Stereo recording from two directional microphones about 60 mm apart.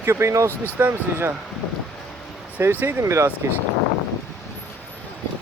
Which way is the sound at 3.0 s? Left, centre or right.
Right.